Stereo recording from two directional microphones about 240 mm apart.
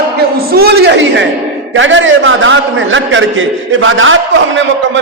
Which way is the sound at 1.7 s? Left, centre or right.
Right.